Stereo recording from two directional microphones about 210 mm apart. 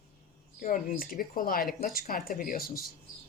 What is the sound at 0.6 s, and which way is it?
Speech, 40° left (ahead or behind).